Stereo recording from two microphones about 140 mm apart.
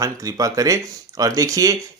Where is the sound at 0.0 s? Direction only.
25° right (ahead or behind).